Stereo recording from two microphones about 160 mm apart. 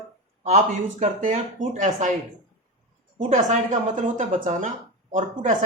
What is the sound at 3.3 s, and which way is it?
Speech, 50° right (ahead or behind).